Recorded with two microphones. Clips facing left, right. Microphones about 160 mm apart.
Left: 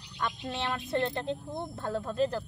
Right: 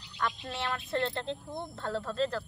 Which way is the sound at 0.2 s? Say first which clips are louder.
Left 1 dB; 20° left (ahead or behind).